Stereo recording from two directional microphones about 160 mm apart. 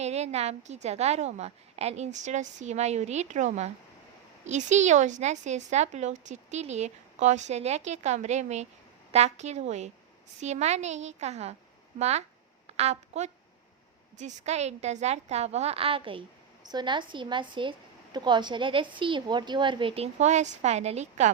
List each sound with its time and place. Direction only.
0.0 s a woman's voice: 45° right (ahead or behind)